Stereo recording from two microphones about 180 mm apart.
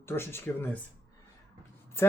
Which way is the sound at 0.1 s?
15° left (ahead or behind).